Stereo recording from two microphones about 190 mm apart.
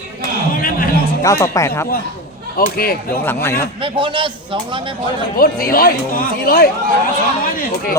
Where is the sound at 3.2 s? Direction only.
15° left (ahead or behind).